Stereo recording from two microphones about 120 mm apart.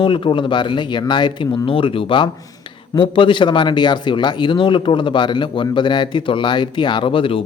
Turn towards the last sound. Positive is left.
turn(degrees=50)  # may be behind; listen again after turning